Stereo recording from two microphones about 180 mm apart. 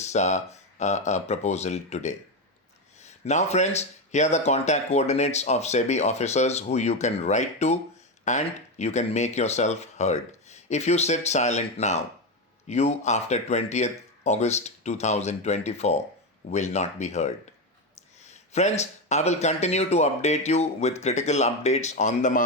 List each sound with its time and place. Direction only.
0.0 s speech: 40° left (ahead or behind)